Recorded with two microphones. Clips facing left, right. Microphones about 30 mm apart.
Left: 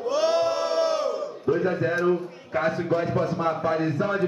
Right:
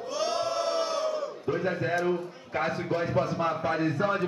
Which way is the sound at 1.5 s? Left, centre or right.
Centre.